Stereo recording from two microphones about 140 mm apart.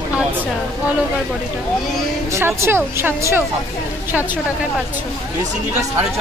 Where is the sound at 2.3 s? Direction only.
20° right (ahead or behind).